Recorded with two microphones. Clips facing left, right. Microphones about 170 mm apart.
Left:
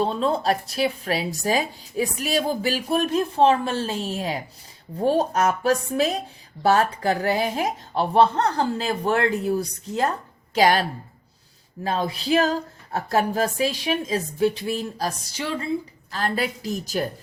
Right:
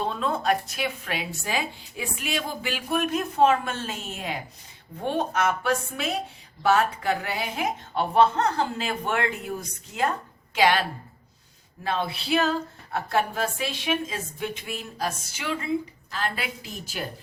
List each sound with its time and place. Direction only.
0.0 s speech: 30° left (ahead or behind)